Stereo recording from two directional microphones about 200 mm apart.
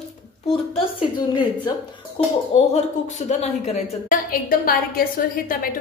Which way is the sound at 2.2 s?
25° left (ahead or behind).